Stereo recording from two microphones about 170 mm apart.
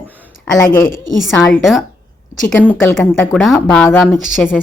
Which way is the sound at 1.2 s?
Centre (ahead or behind).